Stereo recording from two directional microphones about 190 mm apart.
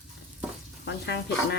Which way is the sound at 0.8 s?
65° left (ahead or behind).